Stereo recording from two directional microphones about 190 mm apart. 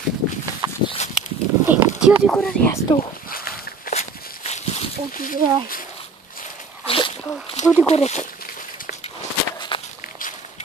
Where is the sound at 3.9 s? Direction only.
35° left (ahead or behind).